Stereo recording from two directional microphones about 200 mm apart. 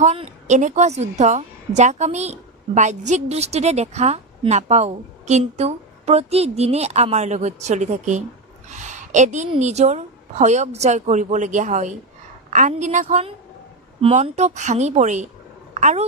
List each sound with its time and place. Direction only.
0.0 s a woman's voice: 35° right (ahead or behind)
8.6 s a sound: 35° right (ahead or behind)
9.5 s a woman's voice: 35° right (ahead or behind)